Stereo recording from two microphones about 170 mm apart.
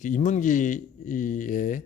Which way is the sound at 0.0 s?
50° left (ahead or behind).